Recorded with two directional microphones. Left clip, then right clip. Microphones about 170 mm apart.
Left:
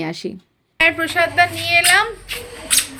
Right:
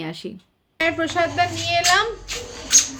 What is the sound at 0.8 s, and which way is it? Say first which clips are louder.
A woman's voice: left 5 dB; 5° right (ahead or behind).